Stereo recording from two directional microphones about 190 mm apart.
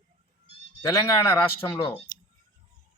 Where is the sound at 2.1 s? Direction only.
45° left (ahead or behind).